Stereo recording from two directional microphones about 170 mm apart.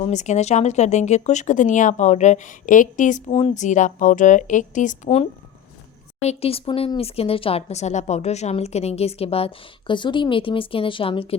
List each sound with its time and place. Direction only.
0.1 s speech: 45° left (ahead or behind)